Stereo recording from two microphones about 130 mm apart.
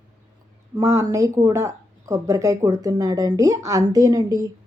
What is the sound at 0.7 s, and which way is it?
Speech, 25° right (ahead or behind).